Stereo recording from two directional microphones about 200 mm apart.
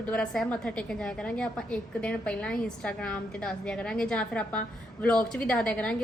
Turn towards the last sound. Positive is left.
turn(degrees=5)  # may be behind; listen again after turning